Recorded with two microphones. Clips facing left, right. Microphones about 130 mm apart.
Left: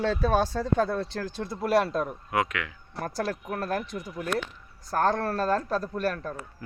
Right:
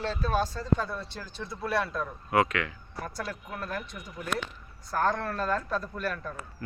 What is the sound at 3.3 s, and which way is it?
A man's voice, 45° left (ahead or behind).